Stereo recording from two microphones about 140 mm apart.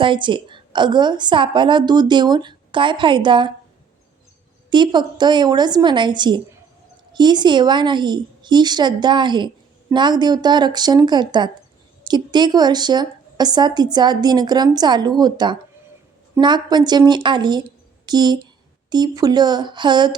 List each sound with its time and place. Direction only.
0.0 s a woman's voice: 35° right (ahead or behind)
4.7 s a woman's voice: 35° right (ahead or behind)